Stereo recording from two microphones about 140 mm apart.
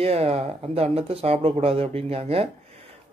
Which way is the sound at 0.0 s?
45° right (ahead or behind).